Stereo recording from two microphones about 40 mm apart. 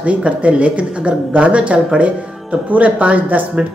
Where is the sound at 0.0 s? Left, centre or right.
Right.